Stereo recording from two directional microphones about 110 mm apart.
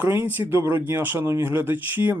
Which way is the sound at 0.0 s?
15° right (ahead or behind).